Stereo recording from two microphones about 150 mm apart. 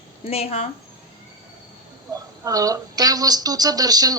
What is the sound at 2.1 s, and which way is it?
Speech, 25° right (ahead or behind).